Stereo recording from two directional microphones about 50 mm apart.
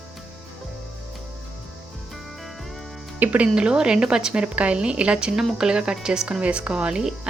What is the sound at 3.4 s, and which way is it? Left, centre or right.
A woman's voice, centre.